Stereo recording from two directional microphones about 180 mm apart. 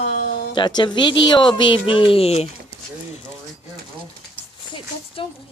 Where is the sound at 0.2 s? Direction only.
75° left (ahead or behind).